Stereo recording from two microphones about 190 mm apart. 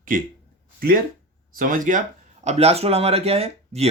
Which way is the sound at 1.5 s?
45° right (ahead or behind).